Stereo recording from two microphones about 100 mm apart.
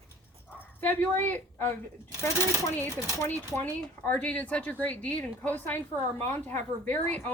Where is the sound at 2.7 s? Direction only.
20° left (ahead or behind).